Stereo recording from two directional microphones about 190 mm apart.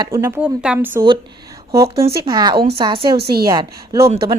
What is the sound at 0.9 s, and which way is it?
Speech, 25° right (ahead or behind).